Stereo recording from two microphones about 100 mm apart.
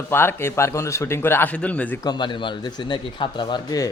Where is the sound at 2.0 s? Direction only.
45° left (ahead or behind).